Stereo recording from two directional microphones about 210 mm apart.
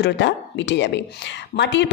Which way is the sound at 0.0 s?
55° left (ahead or behind).